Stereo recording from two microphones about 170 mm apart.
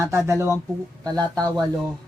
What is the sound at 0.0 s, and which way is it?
Speech, 15° right (ahead or behind).